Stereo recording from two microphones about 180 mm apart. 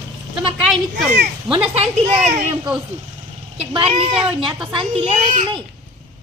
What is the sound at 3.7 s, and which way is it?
A woman's voice, 35° right (ahead or behind).